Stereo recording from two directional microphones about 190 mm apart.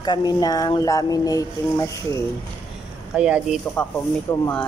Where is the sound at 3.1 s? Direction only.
5° right (ahead or behind).